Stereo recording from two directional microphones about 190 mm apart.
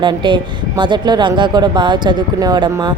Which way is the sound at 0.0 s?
25° right (ahead or behind).